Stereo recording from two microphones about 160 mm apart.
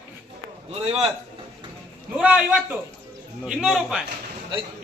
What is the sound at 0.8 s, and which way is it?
Speech, 40° right (ahead or behind).